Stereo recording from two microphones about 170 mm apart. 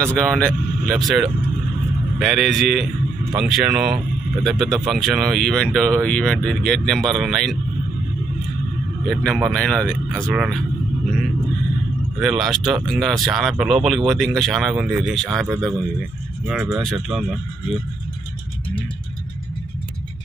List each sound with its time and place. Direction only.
0.0 s speech: 5° left (ahead or behind)
9.0 s speech: 5° left (ahead or behind)
12.2 s speech: centre (ahead or behind)